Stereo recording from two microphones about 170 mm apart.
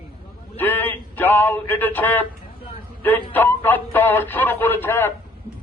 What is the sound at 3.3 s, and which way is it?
A man's voice, 10° left (ahead or behind).